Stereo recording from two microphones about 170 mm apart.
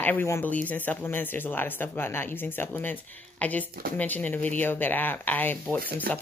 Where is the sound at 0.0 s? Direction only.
10° left (ahead or behind).